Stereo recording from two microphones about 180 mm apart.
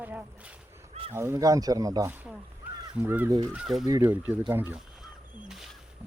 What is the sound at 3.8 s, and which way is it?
Speech, 20° right (ahead or behind).